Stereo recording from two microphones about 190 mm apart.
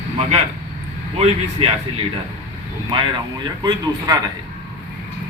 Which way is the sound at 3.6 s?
15° right (ahead or behind).